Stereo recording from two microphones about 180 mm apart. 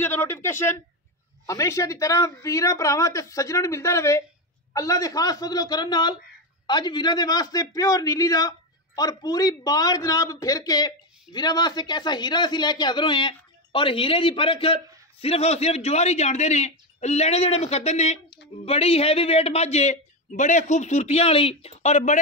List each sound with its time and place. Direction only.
0.0 s a man's voice: 10° left (ahead or behind); by 22.2 s 40° left (ahead or behind)